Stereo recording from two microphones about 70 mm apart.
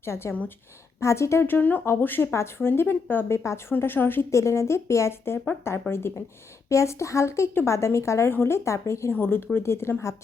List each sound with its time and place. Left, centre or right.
0.0 s speech: left
4.3 s speech: left
6.7 s speech: left
9.1 s speech: left